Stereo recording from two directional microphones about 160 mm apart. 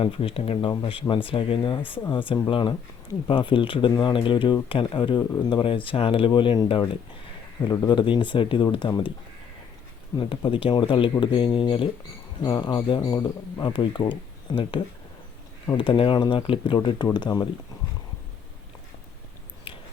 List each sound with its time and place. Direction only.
0.0 s speech: 35° left (ahead or behind)
10.2 s speech: 30° left (ahead or behind)